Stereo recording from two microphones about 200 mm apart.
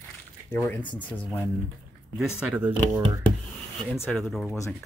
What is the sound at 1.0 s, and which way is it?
Speech, 5° left (ahead or behind).